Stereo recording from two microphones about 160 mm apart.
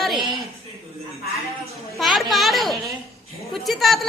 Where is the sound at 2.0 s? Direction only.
Centre (ahead or behind).